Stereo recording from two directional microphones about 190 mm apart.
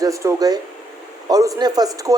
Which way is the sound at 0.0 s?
15° right (ahead or behind).